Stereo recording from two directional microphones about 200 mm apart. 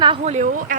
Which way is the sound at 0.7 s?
40° right (ahead or behind).